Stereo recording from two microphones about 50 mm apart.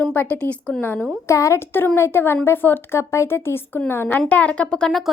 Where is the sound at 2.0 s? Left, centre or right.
Left.